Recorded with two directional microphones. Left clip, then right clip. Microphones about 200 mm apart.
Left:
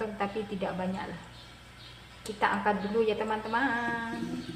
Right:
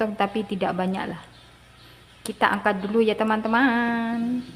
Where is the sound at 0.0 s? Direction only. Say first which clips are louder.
Right 8 dB; 55° right (ahead or behind).